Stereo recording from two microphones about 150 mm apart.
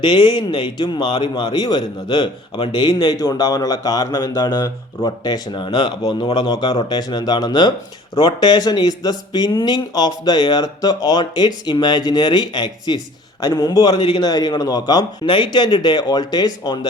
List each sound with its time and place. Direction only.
0.0 s speech: 30° left (ahead or behind)